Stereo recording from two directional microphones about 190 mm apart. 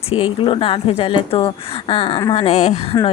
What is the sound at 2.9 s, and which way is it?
Speech, 20° left (ahead or behind).